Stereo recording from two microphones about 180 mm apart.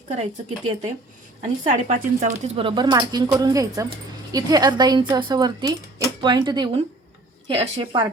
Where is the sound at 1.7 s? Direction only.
45° right (ahead or behind).